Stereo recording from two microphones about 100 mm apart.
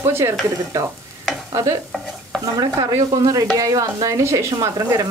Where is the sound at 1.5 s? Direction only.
35° right (ahead or behind).